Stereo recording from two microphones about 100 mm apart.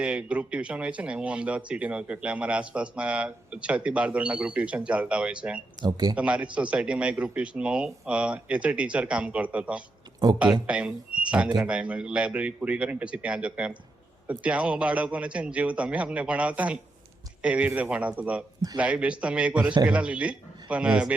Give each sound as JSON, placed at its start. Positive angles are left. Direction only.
{"t": 0.0, "sound": "speech", "side_deg": -10}
{"t": 5.8, "sound": "speech", "side_deg": -40}
{"t": 6.1, "sound": "speech", "side_deg": -15}